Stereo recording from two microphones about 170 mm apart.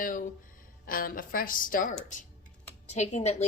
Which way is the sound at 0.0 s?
50° left (ahead or behind).